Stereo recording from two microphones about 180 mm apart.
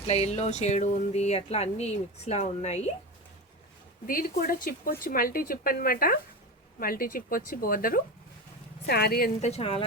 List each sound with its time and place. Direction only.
0.1 s speech: 35° left (ahead or behind)
4.0 s a woman's voice: 50° left (ahead or behind)
9.4 s speech: 35° left (ahead or behind)